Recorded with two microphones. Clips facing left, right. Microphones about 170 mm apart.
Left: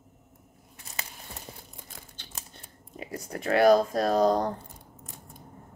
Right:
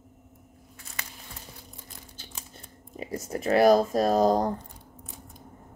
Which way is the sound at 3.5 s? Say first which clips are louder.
Right 1 dB; 5° right (ahead or behind).